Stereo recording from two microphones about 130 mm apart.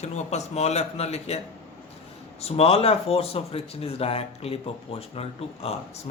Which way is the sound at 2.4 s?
50° left (ahead or behind).